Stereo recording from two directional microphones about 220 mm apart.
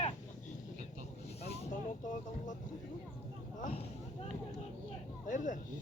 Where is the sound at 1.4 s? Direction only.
35° left (ahead or behind).